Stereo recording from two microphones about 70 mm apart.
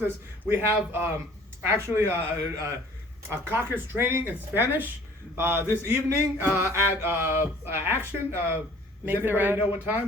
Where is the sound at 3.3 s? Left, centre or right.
Right.